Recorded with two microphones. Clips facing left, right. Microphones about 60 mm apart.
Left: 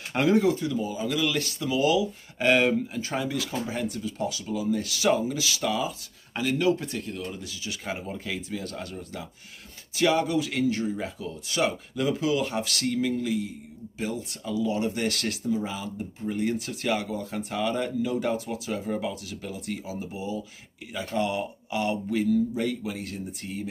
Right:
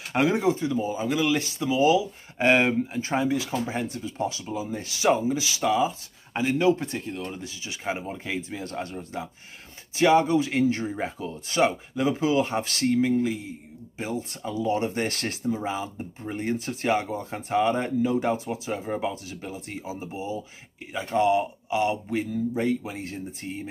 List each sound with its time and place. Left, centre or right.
0.1 s speech: centre